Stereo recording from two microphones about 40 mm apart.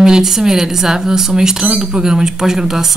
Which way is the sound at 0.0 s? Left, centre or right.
Centre.